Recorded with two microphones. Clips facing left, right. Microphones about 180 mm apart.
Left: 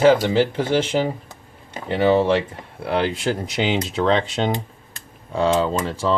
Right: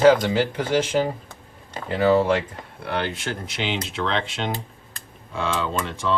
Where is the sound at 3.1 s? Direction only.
40° left (ahead or behind).